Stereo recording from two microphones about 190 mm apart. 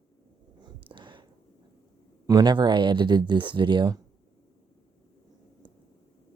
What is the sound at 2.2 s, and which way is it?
Speech, 20° right (ahead or behind).